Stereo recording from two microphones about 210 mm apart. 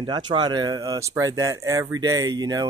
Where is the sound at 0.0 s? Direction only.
20° right (ahead or behind).